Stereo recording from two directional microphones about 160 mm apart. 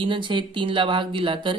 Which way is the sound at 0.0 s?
30° right (ahead or behind).